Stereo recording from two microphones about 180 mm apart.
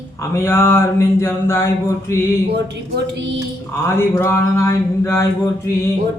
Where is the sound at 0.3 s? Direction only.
15° left (ahead or behind).